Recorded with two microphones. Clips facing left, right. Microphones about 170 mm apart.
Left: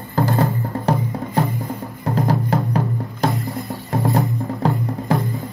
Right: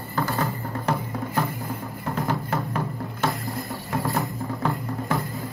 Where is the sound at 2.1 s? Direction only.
35° left (ahead or behind).